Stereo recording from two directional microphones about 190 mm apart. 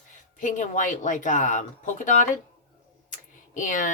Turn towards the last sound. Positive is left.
turn(degrees=40)  # may be behind; listen again after turning